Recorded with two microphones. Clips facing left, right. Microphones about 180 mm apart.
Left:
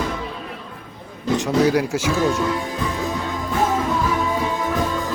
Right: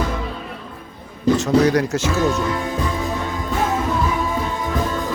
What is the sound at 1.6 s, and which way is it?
Speech, 10° left (ahead or behind).